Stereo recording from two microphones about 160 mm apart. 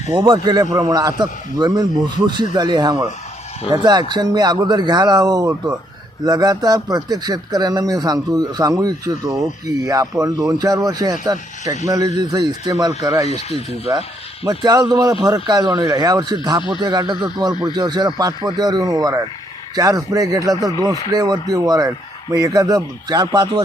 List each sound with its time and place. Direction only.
0.1 s speech: 30° right (ahead or behind)
14.6 s speech: 25° right (ahead or behind)